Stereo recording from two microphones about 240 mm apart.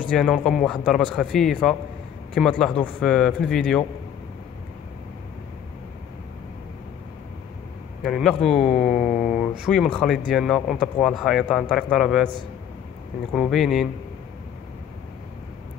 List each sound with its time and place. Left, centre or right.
0.1 s speech: centre
8.0 s speech: centre
8.9 s mantra: left
9.7 s speech: centre
13.3 s speech: centre